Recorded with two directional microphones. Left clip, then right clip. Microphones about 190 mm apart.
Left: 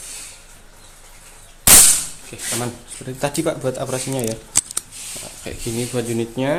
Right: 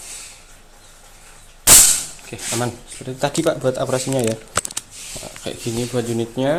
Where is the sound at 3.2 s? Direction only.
10° right (ahead or behind).